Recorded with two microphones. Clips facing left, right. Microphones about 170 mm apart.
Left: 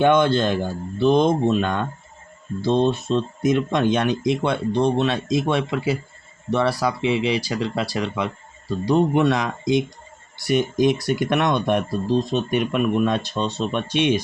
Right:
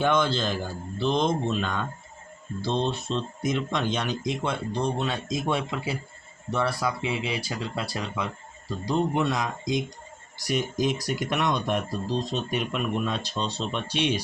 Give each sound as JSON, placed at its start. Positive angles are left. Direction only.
{"t": 0.0, "sound": "speech", "side_deg": 60}